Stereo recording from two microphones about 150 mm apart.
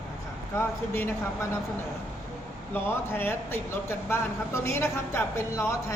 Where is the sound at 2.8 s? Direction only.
15° left (ahead or behind).